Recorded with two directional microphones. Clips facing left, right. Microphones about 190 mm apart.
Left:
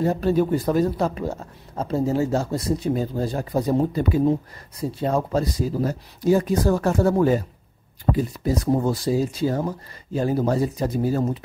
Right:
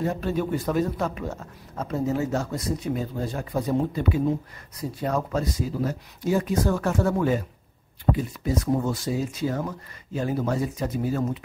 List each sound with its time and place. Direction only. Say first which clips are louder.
0.0 s speech: left 6 dB; 35° left (ahead or behind)
4.7 s speech: left 4 dB; 30° left (ahead or behind)